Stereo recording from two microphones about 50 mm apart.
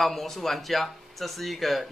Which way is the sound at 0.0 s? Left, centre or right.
Centre.